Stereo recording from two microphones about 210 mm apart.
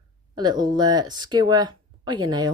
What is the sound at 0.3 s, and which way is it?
Speech, 20° right (ahead or behind).